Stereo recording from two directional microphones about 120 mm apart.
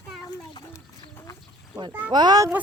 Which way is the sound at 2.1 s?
35° right (ahead or behind).